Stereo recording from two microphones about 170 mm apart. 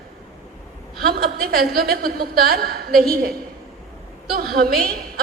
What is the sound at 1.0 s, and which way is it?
A woman's voice, 65° right (ahead or behind).